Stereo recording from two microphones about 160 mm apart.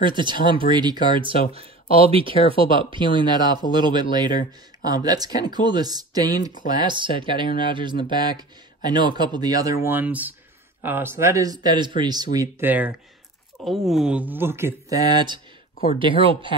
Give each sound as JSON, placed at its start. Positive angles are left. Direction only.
{"t": 0.0, "sound": "speech", "side_deg": -30}
{"t": 9.8, "sound": "speech", "side_deg": -10}
{"t": 12.5, "sound": "speech", "side_deg": -10}
{"t": 13.7, "sound": "speech", "side_deg": 0}